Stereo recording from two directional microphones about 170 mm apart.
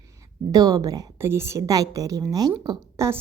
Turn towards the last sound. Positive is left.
turn(degrees=-15)  # may be behind; listen again after turning